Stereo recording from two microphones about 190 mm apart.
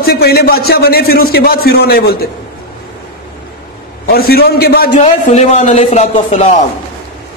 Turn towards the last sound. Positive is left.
turn(degrees=35)  # may be behind; listen again after turning